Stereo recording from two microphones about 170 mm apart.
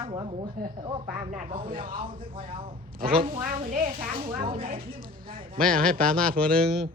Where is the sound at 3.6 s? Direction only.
50° right (ahead or behind).